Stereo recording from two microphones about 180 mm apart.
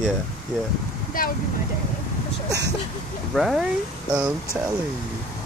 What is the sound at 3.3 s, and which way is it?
Speech, centre (ahead or behind).